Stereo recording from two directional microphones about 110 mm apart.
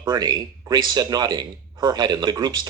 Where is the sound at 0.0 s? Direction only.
40° right (ahead or behind).